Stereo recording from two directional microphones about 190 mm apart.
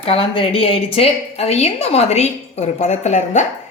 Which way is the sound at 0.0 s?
30° left (ahead or behind).